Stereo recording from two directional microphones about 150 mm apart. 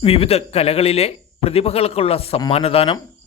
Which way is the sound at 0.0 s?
40° left (ahead or behind).